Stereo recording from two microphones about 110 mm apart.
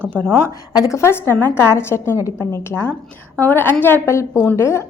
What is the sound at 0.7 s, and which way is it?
A woman's voice, 30° left (ahead or behind).